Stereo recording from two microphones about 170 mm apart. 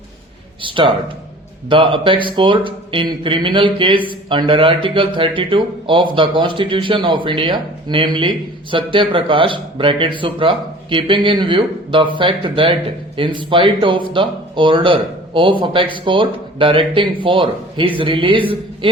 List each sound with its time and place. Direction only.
0.6 s speech: 30° right (ahead or behind)